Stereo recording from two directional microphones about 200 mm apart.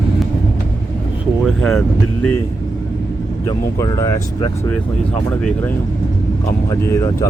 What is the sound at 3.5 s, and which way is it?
Speech, 15° left (ahead or behind).